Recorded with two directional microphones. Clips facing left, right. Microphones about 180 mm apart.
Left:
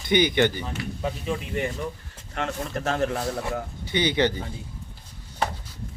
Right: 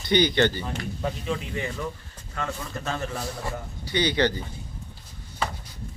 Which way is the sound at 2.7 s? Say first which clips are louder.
Left 8 dB; 55° left (ahead or behind).